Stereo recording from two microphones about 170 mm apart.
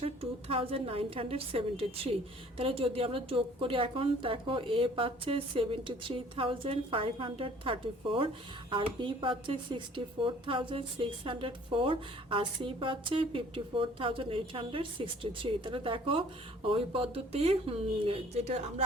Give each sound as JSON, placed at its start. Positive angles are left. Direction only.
{"t": 0.0, "sound": "a woman's voice", "side_deg": -35}